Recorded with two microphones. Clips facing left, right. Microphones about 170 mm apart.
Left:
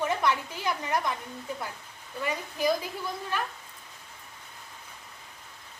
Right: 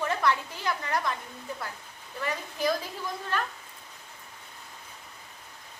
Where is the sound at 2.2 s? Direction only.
10° left (ahead or behind).